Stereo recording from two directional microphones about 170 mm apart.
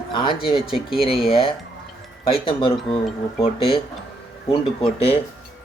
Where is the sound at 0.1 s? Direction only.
30° left (ahead or behind).